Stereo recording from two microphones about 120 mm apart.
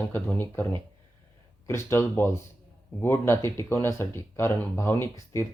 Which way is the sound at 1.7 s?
20° left (ahead or behind).